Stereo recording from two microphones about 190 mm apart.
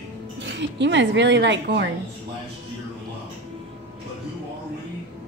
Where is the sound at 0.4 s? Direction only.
70° right (ahead or behind).